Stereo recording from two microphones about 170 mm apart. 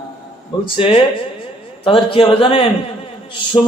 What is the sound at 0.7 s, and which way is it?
A man's voice, 35° left (ahead or behind).